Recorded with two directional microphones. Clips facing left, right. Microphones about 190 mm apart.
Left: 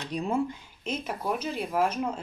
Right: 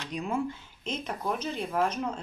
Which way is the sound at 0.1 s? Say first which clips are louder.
Left 3 dB; 35° left (ahead or behind).